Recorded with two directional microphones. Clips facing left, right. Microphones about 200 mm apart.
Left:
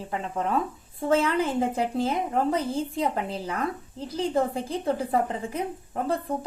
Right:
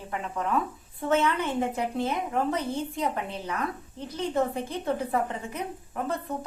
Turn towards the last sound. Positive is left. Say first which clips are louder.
# left 3 dB
turn(degrees=30)  # may be behind; listen again after turning